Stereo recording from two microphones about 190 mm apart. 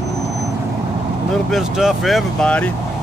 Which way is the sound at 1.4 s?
Centre (ahead or behind).